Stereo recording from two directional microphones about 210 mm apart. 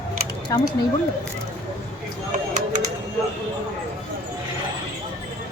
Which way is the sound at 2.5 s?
35° right (ahead or behind).